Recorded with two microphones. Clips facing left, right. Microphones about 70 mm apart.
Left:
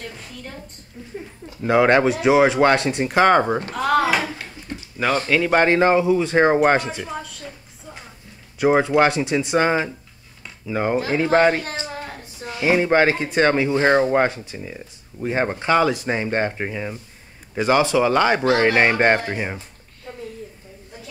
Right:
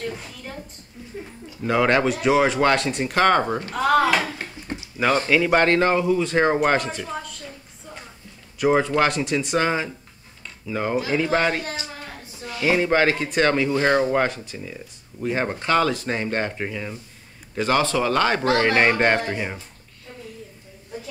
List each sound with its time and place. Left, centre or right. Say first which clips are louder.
1.6 s speech: left 4 dB; left
3.7 s speech: right 1 dB; centre
5.6 s speech: left 3 dB; centre
7.0 s a woman's voice: left 1 dB; centre
8.5 s speech: left 3 dB; left
10.4 s cutlery: left 3 dB; left
11.0 s speech: left 4 dB; left
20.1 s a sound: left 5 dB; left